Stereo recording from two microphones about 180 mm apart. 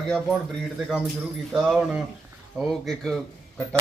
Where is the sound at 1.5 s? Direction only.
5° right (ahead or behind).